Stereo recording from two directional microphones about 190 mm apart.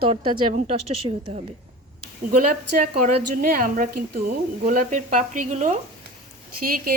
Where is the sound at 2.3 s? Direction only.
45° right (ahead or behind).